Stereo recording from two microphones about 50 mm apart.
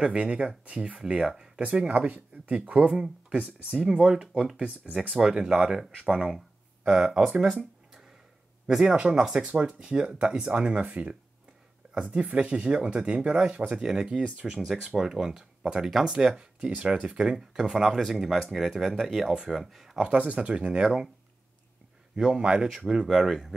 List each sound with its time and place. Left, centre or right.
0.0 s speech: right
2.9 s speech: centre
3.3 s speech: centre
6.8 s a sound: right
8.8 s speech: right
13.8 s speech: centre
14.9 s speech: centre
19.6 s speech: centre
20.0 s speech: right
20.8 s speech: centre
22.1 s a man's voice: centre